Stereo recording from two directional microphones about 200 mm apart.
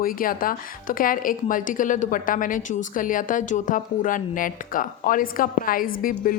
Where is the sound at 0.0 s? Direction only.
45° left (ahead or behind).